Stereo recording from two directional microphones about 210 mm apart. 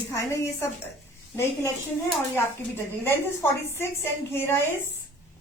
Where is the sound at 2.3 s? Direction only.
10° left (ahead or behind).